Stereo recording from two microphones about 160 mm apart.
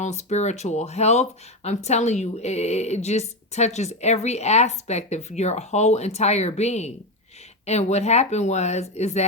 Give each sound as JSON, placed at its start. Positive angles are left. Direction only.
{"t": 0.0, "sound": "speech", "side_deg": 45}